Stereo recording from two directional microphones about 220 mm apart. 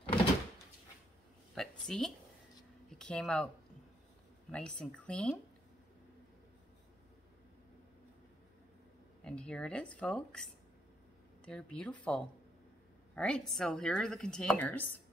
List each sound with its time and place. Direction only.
1.5 s speech: 5° left (ahead or behind)
4.5 s a woman's voice: 5° left (ahead or behind)
9.2 s a woman's voice: 5° left (ahead or behind)
11.4 s a woman's voice: 5° left (ahead or behind)